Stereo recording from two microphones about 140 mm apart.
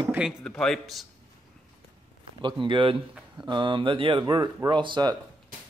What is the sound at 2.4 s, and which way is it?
Speech, 35° right (ahead or behind).